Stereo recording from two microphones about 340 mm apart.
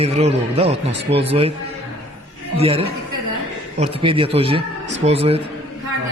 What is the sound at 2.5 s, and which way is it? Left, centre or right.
Speech, centre.